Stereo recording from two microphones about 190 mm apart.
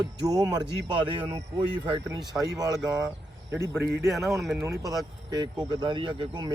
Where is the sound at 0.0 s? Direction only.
20° right (ahead or behind).